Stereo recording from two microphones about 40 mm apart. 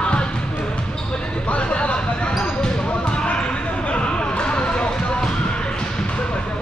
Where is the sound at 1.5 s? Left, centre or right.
Left.